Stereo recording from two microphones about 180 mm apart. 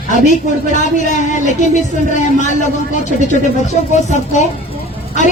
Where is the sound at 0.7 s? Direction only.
45° left (ahead or behind).